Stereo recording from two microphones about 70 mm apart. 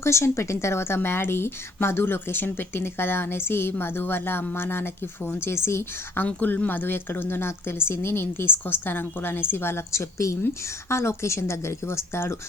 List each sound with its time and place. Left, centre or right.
0.0 s a woman's voice: left
6.2 s a woman's voice: left